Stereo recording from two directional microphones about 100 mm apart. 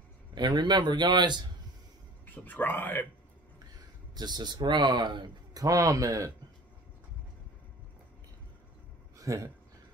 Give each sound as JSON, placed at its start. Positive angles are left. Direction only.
{"t": 0.3, "sound": "a man's voice", "side_deg": -45}
{"t": 2.2, "sound": "speech", "side_deg": 20}
{"t": 4.1, "sound": "a man's voice", "side_deg": -45}
{"t": 9.2, "sound": "speech", "side_deg": -30}